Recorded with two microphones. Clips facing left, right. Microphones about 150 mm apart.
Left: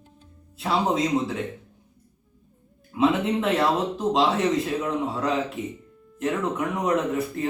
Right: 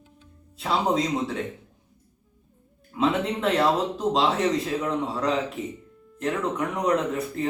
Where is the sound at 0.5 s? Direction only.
Centre (ahead or behind).